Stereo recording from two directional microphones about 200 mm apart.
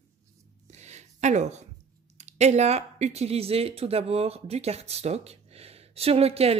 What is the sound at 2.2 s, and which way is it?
Speech, 35° right (ahead or behind).